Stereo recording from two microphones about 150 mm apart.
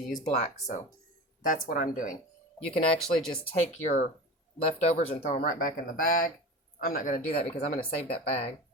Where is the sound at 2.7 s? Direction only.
40° left (ahead or behind).